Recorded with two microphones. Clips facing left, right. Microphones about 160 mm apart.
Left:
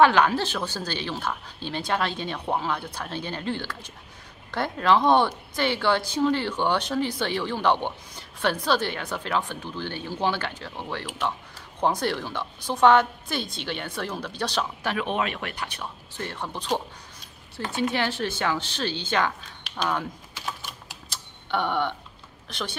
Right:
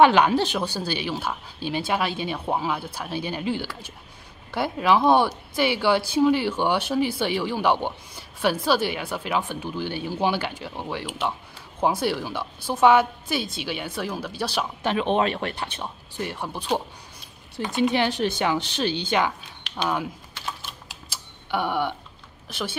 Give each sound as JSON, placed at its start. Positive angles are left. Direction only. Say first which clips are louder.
{"t": 0.0, "sound": "speech", "louder": "right 2 dB", "side_deg": -15}
{"t": 14.8, "sound": "speech", "louder": "right 7 dB", "side_deg": -25}
{"t": 16.2, "sound": "speech", "louder": "right 3 dB", "side_deg": -10}
{"t": 21.1, "sound": "a sound", "louder": "right 1 dB", "side_deg": -5}
{"t": 22.5, "sound": "speech", "louder": "right 2 dB", "side_deg": -5}